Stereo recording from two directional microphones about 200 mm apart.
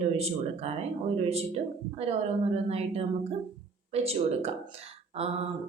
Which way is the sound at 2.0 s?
30° right (ahead or behind).